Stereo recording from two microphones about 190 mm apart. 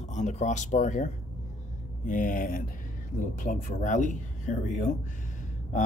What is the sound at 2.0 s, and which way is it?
Speech, 45° left (ahead or behind).